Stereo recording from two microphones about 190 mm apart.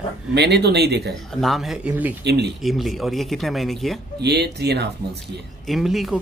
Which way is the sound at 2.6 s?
Centre (ahead or behind).